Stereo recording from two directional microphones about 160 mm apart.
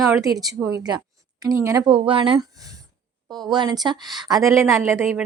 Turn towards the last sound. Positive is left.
turn(degrees=-15)  # may be behind; listen again after turning